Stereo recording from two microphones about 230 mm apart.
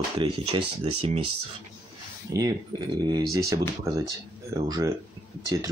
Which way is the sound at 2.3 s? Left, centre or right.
Centre.